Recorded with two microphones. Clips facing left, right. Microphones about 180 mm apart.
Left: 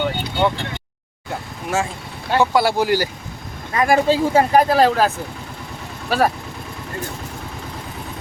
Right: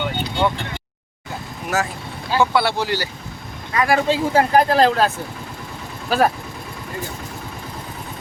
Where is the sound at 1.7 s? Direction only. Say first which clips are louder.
Left 1 dB; 25° left (ahead or behind).